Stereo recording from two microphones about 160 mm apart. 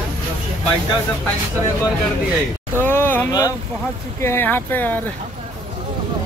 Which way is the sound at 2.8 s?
15° left (ahead or behind).